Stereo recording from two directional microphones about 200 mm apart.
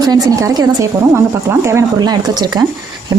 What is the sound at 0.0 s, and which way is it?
Speech, 20° right (ahead or behind).